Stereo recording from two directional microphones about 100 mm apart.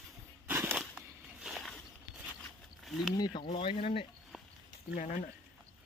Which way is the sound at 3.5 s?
65° left (ahead or behind).